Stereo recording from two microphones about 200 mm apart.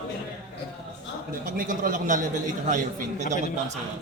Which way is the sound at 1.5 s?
45° right (ahead or behind).